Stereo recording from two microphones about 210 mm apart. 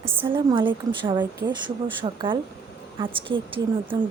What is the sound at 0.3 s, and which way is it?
A woman's voice, 25° right (ahead or behind).